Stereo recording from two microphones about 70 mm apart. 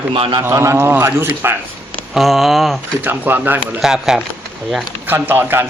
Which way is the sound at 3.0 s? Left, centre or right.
Right.